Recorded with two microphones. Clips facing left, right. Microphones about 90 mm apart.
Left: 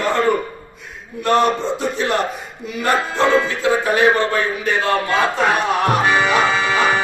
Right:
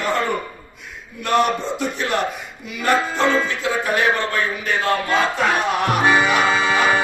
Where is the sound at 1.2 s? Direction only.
35° left (ahead or behind).